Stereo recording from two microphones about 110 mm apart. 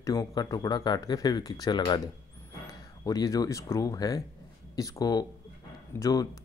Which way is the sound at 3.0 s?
35° left (ahead or behind).